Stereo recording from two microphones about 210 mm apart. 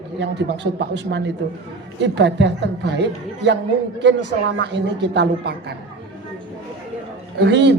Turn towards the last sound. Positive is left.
turn(degrees=-55)  # may be behind; listen again after turning